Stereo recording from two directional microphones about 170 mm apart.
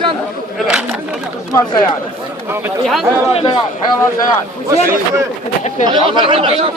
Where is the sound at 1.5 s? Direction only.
20° left (ahead or behind).